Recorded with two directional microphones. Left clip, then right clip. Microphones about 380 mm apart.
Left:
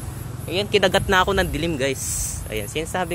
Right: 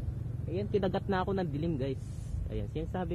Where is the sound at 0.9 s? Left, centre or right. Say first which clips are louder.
Left 14 dB; centre.